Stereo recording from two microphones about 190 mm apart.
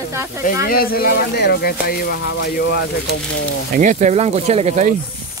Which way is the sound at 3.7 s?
40° right (ahead or behind).